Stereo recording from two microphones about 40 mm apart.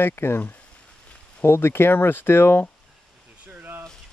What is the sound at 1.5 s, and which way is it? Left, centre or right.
Speech, left.